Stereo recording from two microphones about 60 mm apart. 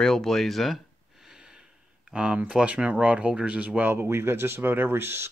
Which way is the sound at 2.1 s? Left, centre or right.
Centre.